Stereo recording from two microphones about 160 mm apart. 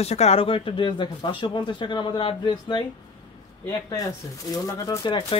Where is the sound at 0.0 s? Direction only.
40° left (ahead or behind).